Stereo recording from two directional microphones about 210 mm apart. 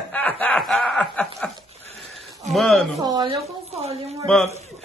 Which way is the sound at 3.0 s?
20° right (ahead or behind).